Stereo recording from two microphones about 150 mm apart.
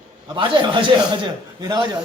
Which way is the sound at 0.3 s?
30° right (ahead or behind).